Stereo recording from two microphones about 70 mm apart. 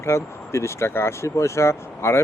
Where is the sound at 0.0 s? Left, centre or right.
Left.